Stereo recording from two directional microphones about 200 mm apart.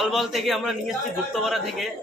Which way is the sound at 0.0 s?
Centre (ahead or behind).